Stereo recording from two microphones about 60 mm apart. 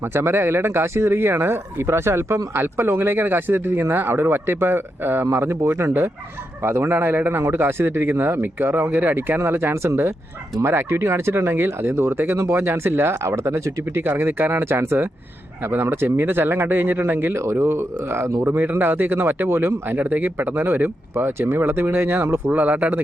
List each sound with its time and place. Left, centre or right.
0.1 s speech: right
5.3 s speech: right
6.9 s speech: right
14.0 s speech: right
17.4 s speech: right
22.4 s speech: right